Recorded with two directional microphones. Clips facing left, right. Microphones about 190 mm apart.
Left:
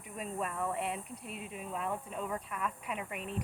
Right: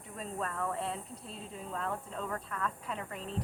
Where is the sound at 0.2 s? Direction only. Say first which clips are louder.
Even; 10° left (ahead or behind).